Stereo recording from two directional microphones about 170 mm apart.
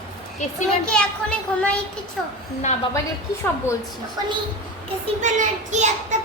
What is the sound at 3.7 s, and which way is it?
Speech, 15° left (ahead or behind).